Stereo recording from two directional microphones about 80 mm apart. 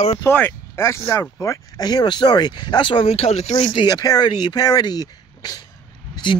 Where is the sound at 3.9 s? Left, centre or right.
Left.